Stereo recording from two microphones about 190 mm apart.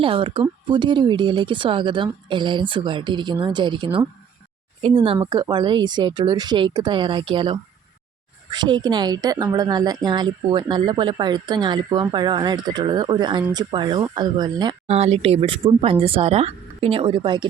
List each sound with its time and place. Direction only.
0.0 s speech: 25° right (ahead or behind)
14.8 s speech: 35° right (ahead or behind)